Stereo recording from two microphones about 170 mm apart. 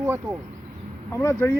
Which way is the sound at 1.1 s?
15° left (ahead or behind).